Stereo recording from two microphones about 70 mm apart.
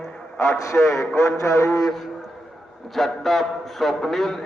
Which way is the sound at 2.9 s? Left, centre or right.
Centre.